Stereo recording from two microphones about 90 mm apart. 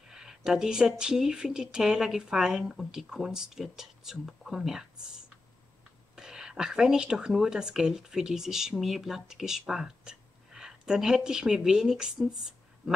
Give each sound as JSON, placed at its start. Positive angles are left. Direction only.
{"t": 0.1, "sound": "speech", "side_deg": -5}
{"t": 6.1, "sound": "speech", "side_deg": -5}